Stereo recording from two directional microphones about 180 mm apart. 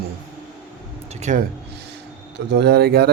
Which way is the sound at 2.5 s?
65° right (ahead or behind).